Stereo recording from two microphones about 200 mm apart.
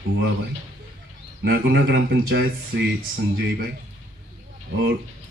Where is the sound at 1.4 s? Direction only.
55° right (ahead or behind).